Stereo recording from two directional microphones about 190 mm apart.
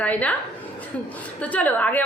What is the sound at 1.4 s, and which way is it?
Speech, 10° left (ahead or behind).